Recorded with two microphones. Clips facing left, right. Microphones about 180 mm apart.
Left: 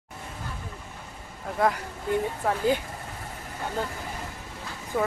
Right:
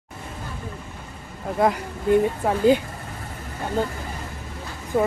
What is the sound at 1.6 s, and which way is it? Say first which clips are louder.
Speech: right 4 dB; 20° right (ahead or behind).